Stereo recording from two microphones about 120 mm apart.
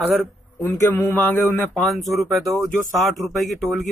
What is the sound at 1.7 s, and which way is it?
Speech, centre (ahead or behind).